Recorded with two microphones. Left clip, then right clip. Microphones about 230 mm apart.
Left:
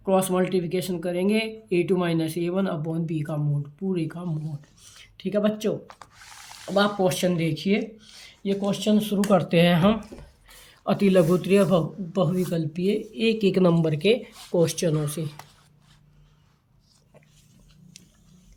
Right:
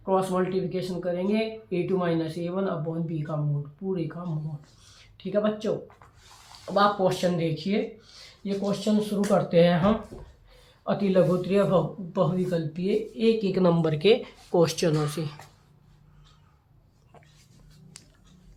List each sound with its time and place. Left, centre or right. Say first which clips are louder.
0.0 s a man's voice: left 2 dB; left
4.8 s a sound: left 8 dB; left
6.7 s a man's voice: even; left